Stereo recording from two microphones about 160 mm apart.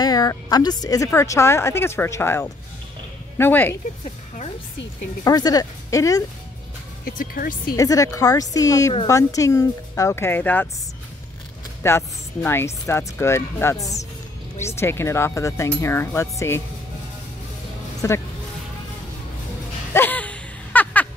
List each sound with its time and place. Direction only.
0.0 s speech: 25° left (ahead or behind)
5.2 s speech: 25° left (ahead or behind)
7.1 s speech: 65° left (ahead or behind)
7.7 s speech: 20° left (ahead or behind)
11.8 s speech: 15° left (ahead or behind)
18.0 s speech: 15° left (ahead or behind)
19.9 s a sound: 10° left (ahead or behind)